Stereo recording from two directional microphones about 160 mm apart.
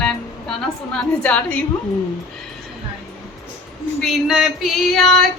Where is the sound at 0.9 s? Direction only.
10° left (ahead or behind).